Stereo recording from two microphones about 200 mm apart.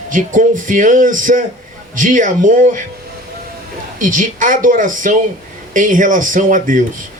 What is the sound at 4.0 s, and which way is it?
A man's voice, 40° right (ahead or behind).